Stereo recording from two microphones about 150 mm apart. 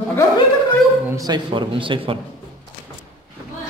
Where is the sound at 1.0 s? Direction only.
25° right (ahead or behind).